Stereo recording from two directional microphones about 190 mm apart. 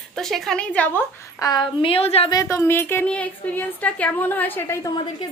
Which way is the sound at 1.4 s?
20° left (ahead or behind).